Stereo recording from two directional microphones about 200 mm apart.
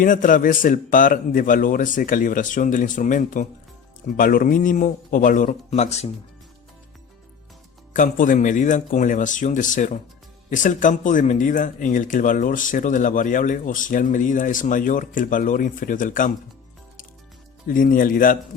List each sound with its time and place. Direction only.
0.0 s speech: 40° left (ahead or behind)
7.9 s speech: 40° left (ahead or behind)
17.7 s speech: 45° left (ahead or behind)